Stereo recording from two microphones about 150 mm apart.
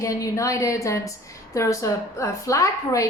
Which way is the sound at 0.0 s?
20° left (ahead or behind).